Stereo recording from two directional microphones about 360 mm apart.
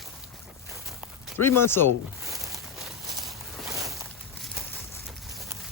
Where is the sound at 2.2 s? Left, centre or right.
Centre.